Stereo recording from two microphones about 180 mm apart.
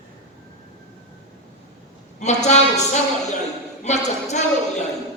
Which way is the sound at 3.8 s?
40° left (ahead or behind).